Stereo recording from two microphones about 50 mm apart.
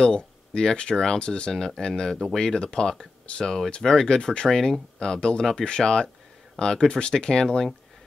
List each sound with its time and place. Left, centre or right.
0.0 s speech: centre